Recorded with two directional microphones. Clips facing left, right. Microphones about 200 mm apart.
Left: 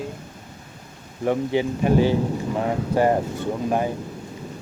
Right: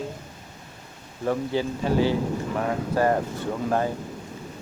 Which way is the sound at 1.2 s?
20° left (ahead or behind).